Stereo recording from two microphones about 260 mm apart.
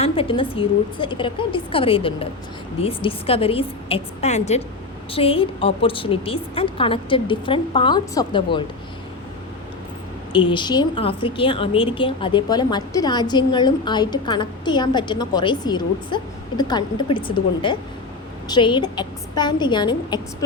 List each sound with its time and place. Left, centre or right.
0.0 s a woman's voice: left
10.3 s a woman's voice: centre